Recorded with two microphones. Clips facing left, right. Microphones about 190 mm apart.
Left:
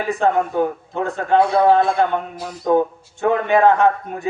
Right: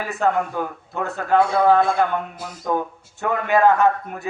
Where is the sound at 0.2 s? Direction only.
25° left (ahead or behind).